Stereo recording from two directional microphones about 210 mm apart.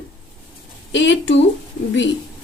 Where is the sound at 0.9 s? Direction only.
60° left (ahead or behind).